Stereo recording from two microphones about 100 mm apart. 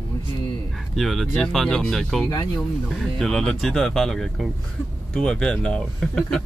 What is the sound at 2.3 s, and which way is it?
Speech, 40° left (ahead or behind).